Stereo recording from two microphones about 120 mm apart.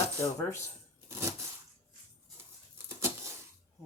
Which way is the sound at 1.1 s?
25° right (ahead or behind).